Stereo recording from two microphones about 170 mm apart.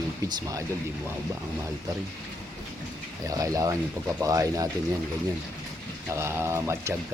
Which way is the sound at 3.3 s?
20° right (ahead or behind).